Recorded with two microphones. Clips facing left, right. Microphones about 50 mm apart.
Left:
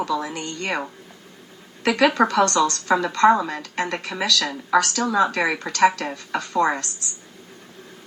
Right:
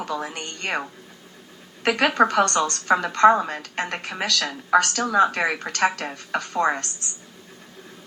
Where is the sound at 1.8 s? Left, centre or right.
Right.